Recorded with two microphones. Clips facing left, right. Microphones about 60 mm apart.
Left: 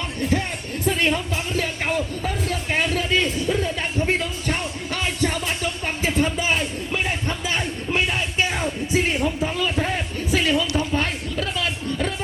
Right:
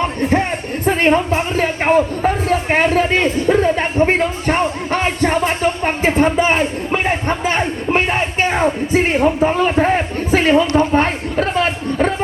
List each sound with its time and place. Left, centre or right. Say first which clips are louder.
0.0 s music: right 8 dB; right
0.9 s speech: right 8 dB; right